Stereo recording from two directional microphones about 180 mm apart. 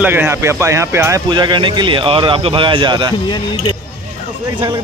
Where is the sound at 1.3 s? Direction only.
25° right (ahead or behind).